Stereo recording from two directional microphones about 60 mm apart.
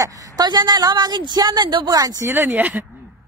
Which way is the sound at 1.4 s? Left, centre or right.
Right.